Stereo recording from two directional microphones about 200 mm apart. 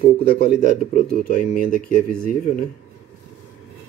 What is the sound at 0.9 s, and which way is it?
Speech, 40° left (ahead or behind).